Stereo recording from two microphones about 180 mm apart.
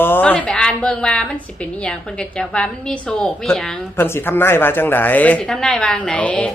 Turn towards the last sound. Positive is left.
turn(degrees=5)  # may be behind; listen again after turning